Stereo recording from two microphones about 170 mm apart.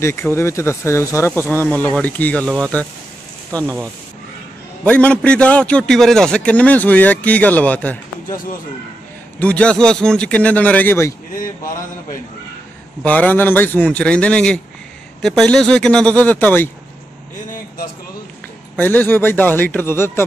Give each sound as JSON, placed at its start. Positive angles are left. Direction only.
{"t": 0.0, "sound": "a man's voice", "side_deg": 15}
{"t": 4.8, "sound": "a man's voice", "side_deg": 5}
{"t": 9.4, "sound": "a man's voice", "side_deg": 5}
{"t": 13.0, "sound": "a man's voice", "side_deg": 10}
{"t": 18.8, "sound": "a man's voice", "side_deg": 10}